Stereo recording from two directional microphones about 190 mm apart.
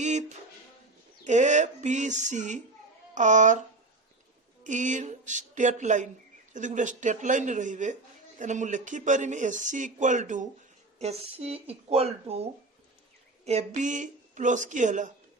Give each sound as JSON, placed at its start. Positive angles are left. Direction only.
{"t": 0.0, "sound": "a sound", "side_deg": -40}
{"t": 1.2, "sound": "a man's voice", "side_deg": -40}
{"t": 4.6, "sound": "a man's voice", "side_deg": -40}